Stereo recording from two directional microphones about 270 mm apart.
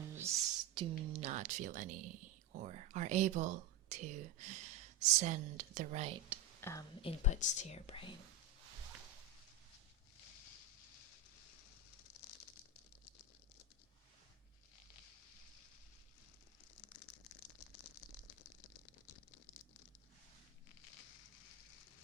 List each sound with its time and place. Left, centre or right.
0.1 s speech: centre
6.6 s speech: centre
7.0 s speech: left